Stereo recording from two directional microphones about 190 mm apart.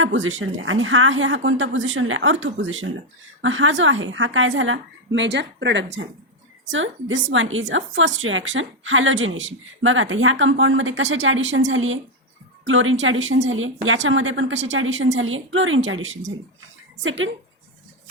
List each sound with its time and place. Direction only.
0.0 s speech: 90° right
3.4 s a woman's voice: 90° right; by 6.0 s 70° right (ahead or behind)
6.7 s speech: 90° right